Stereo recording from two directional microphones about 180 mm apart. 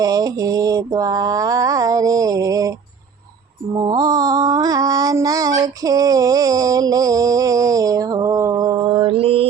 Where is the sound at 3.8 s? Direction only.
20° right (ahead or behind).